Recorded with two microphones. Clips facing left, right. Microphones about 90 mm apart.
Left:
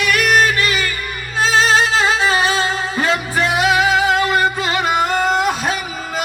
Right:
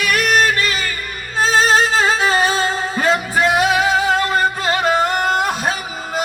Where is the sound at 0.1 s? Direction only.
35° right (ahead or behind).